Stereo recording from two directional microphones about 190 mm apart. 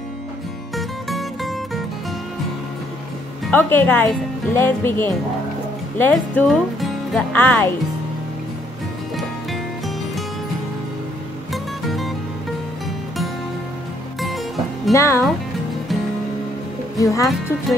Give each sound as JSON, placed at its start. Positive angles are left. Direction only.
{"t": 0.7, "sound": "music", "side_deg": 0}
{"t": 3.4, "sound": "speech", "side_deg": 10}
{"t": 9.1, "sound": "music", "side_deg": 0}
{"t": 11.5, "sound": "music", "side_deg": 0}
{"t": 14.9, "sound": "speech", "side_deg": 15}
{"t": 17.0, "sound": "speech", "side_deg": 15}